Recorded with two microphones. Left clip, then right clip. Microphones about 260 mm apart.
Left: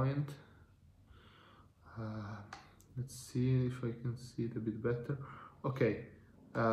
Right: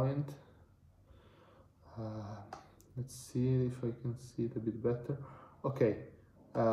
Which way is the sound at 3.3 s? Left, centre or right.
Left.